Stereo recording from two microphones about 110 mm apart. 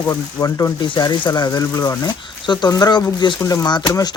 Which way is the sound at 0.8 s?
45° left (ahead or behind).